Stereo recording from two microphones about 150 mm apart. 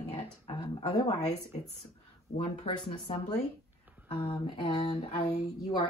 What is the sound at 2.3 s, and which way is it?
Speech, 35° left (ahead or behind).